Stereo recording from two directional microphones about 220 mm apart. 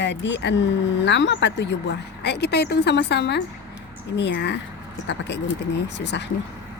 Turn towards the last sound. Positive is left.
turn(degrees=50)  # may be behind; listen again after turning